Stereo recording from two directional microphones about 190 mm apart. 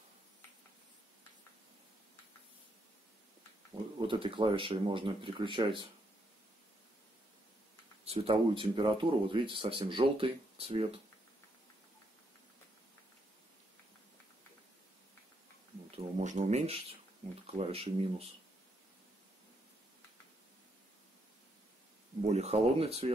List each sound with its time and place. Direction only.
4.0 s speech: 25° right (ahead or behind)
8.0 s speech: 30° right (ahead or behind)
16.2 s speech: 40° right (ahead or behind)
22.2 s speech: 35° right (ahead or behind)